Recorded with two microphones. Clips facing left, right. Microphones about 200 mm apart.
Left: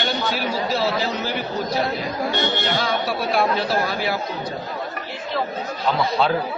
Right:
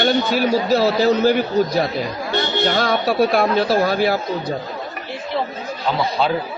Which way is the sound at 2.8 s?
45° right (ahead or behind).